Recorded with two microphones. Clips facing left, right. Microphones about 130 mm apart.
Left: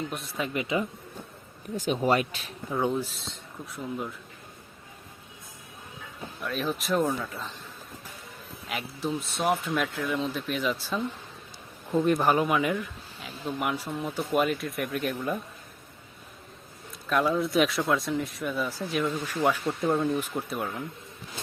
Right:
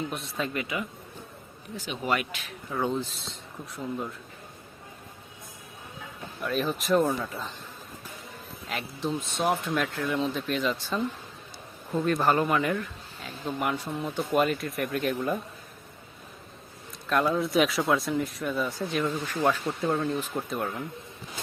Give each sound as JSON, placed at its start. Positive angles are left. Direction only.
{"t": 0.1, "sound": "speech", "side_deg": 0}
{"t": 0.4, "sound": "speech", "side_deg": 20}
{"t": 1.7, "sound": "speech", "side_deg": 40}
{"t": 2.6, "sound": "speech", "side_deg": 15}
{"t": 6.4, "sound": "speech", "side_deg": 0}
{"t": 8.7, "sound": "speech", "side_deg": 5}
{"t": 17.1, "sound": "speech", "side_deg": 0}